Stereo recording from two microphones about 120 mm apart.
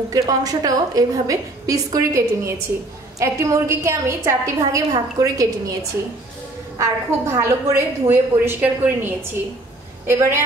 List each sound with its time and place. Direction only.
0.1 s a woman's voice: 30° right (ahead or behind)